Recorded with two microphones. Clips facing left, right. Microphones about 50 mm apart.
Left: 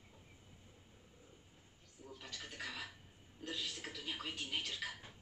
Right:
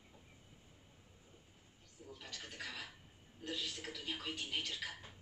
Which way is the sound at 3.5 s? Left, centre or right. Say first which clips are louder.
Right 1 dB; centre.